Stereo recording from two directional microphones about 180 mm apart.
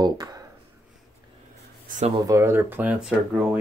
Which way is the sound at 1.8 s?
45° right (ahead or behind).